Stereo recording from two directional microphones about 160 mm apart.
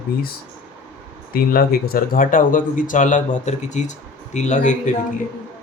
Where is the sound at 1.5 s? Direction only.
70° left (ahead or behind); by 4.8 s 50° left (ahead or behind).